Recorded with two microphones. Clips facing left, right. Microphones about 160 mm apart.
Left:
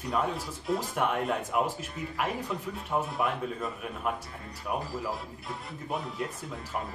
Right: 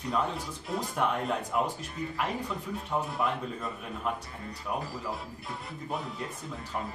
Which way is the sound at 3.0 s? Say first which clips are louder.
Left 1 dB; centre (ahead or behind).